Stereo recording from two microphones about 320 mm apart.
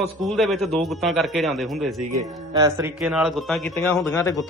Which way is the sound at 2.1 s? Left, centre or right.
Centre.